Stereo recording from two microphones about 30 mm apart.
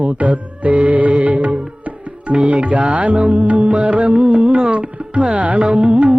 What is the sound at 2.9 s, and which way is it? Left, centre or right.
Music, right.